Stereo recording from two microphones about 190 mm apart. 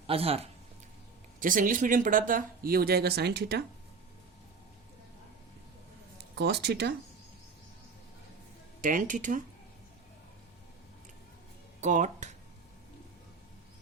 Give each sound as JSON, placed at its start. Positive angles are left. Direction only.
{"t": 0.1, "sound": "speech", "side_deg": -30}
{"t": 1.4, "sound": "speech", "side_deg": -45}
{"t": 6.3, "sound": "speech", "side_deg": -60}
{"t": 8.8, "sound": "speech", "side_deg": -45}
{"t": 11.8, "sound": "speech", "side_deg": -40}